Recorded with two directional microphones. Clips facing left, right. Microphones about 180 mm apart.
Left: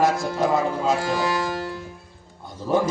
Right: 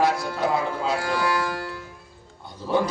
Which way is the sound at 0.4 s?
45° left (ahead or behind).